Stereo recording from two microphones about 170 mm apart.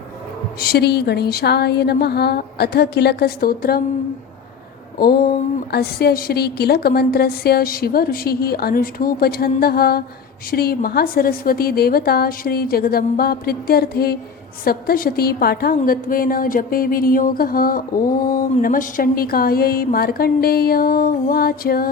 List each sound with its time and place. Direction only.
0.6 s a woman's voice: 70° left (ahead or behind)
4.9 s a woman's voice: 60° left (ahead or behind)